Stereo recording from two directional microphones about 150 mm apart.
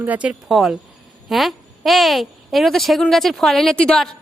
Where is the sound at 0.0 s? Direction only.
10° right (ahead or behind).